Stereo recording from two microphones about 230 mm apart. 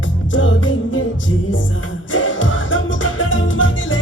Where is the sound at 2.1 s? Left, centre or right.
Left.